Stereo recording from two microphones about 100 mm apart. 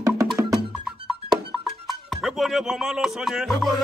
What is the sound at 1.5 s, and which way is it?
Music, centre (ahead or behind).